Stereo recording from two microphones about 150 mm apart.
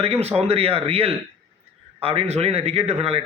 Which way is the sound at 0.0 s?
40° right (ahead or behind).